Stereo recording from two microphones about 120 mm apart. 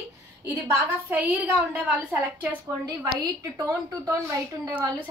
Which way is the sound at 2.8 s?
30° right (ahead or behind).